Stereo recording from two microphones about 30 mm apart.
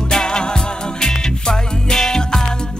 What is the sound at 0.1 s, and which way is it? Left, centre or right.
Music, left.